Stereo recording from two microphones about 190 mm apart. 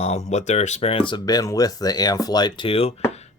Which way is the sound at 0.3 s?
40° left (ahead or behind).